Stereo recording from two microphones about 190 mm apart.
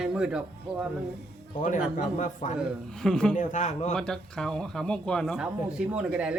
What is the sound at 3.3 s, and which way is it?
Speech, 40° left (ahead or behind).